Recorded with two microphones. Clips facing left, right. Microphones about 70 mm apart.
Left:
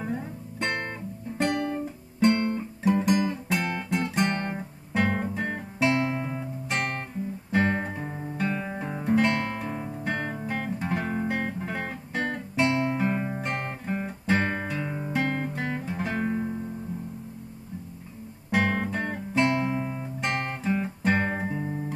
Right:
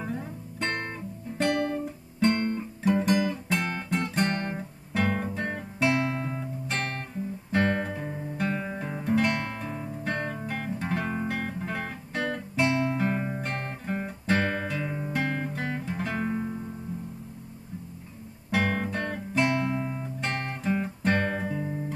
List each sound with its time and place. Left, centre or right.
0.0 s music: centre
1.4 s guitar: centre
3.6 s music: centre
4.1 s guitar: centre
6.0 s music: centre
7.5 s guitar: centre
8.4 s music: centre
8.7 s guitar: centre
9.7 s music: left
10.0 s guitar: centre
15.8 s music: centre
18.5 s guitar: centre
19.6 s guitar: centre